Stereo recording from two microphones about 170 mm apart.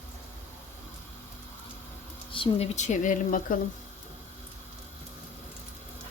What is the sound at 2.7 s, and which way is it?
Speech, 45° left (ahead or behind).